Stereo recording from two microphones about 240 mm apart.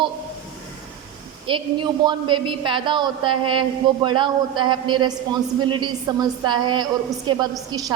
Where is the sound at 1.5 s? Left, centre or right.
Centre.